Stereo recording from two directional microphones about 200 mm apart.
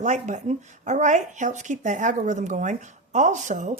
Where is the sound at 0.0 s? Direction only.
35° right (ahead or behind).